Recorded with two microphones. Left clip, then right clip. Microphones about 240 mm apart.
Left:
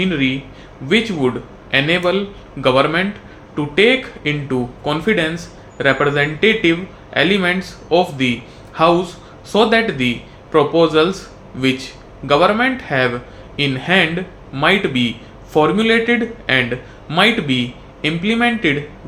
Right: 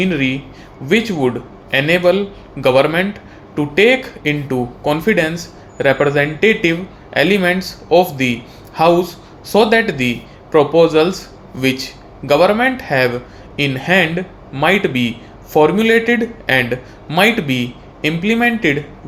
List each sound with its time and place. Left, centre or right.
0.0 s speech: right